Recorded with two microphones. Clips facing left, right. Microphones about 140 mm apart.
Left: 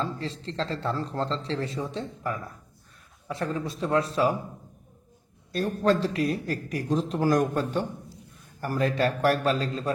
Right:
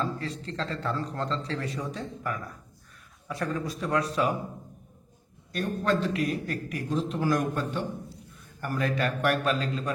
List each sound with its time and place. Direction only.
0.0 s speech: 30° left (ahead or behind)
5.5 s a man's voice: 35° left (ahead or behind)